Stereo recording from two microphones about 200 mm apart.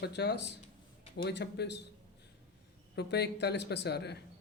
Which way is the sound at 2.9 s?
55° left (ahead or behind).